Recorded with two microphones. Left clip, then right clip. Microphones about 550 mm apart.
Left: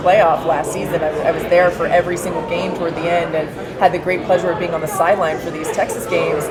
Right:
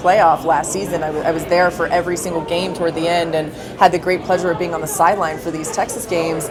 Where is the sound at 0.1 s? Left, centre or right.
Right.